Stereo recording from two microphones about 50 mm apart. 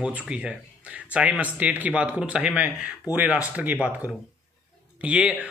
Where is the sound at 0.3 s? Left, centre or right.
Right.